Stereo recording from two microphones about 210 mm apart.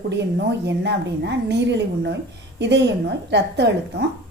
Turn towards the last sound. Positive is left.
turn(degrees=-55)  # may be behind; listen again after turning